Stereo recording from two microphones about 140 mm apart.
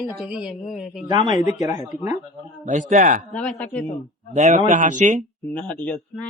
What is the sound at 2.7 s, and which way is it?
Speech, 65° right (ahead or behind).